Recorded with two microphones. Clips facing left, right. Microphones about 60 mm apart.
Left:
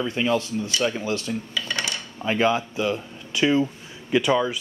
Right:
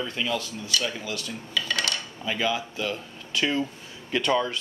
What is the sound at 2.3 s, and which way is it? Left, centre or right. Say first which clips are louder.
Speech: left 6 dB; left.